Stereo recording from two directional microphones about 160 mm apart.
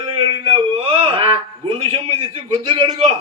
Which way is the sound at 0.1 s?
30° right (ahead or behind).